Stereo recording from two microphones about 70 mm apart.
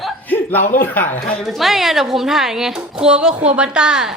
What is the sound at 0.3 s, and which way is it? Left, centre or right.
Speech, left.